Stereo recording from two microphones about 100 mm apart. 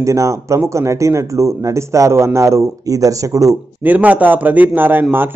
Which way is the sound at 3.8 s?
15° right (ahead or behind).